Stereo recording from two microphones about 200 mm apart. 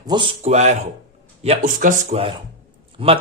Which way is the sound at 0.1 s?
25° right (ahead or behind).